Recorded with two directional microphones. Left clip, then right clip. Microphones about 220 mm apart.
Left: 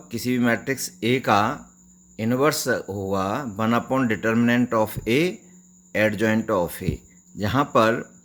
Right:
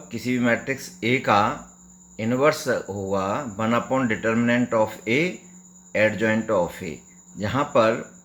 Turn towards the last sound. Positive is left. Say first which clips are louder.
# left 1 dB
turn(degrees=40)  # may be behind; listen again after turning